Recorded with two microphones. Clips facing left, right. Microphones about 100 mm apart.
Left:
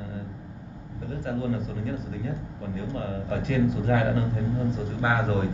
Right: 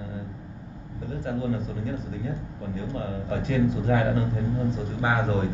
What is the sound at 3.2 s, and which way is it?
Speech, 25° right (ahead or behind).